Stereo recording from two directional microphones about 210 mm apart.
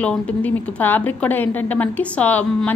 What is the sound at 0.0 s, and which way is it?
A woman's voice, 5° left (ahead or behind).